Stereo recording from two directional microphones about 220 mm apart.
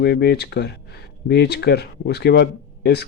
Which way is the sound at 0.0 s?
50° left (ahead or behind).